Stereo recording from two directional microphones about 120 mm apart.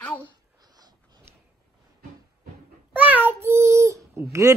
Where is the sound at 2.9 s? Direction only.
15° right (ahead or behind).